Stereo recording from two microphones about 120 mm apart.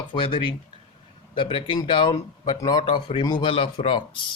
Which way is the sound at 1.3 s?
45° left (ahead or behind).